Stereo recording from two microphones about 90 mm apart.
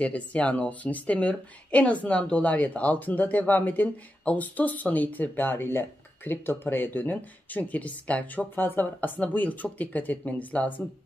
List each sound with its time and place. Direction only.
0.0 s a woman's voice: 15° left (ahead or behind)